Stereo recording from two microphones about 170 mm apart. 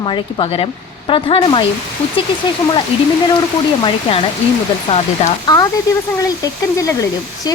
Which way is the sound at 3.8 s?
35° left (ahead or behind).